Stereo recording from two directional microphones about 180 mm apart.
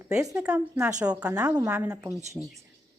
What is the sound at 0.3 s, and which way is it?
A woman's voice, 5° right (ahead or behind).